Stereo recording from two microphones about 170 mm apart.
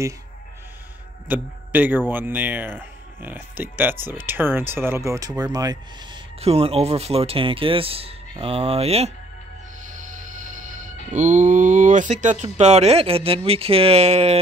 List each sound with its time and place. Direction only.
1.3 s speech: 10° right (ahead or behind)
6.4 s speech: 35° right (ahead or behind)
11.1 s speech: 45° right (ahead or behind)